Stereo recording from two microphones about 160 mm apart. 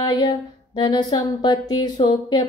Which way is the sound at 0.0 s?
25° left (ahead or behind).